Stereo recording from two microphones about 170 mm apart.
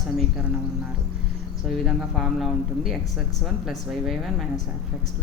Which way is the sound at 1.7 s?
Centre (ahead or behind).